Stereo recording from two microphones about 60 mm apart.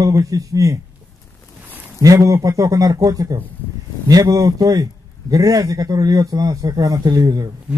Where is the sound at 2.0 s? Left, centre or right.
Right.